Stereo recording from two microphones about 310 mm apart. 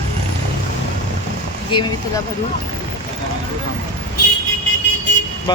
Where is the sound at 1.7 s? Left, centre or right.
Centre.